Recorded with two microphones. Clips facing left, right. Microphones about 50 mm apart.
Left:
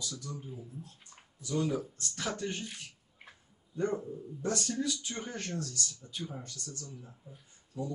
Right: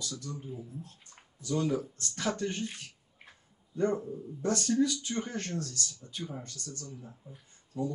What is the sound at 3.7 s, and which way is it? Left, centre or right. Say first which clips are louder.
Speech: right 3 dB; right.